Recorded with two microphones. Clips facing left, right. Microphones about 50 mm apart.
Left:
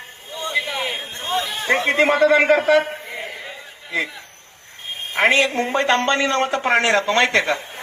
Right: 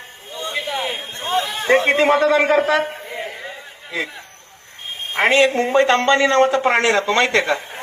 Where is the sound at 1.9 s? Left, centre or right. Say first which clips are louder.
Right 1 dB; right.